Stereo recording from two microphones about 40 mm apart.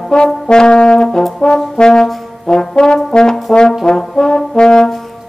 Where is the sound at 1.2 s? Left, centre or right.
Centre.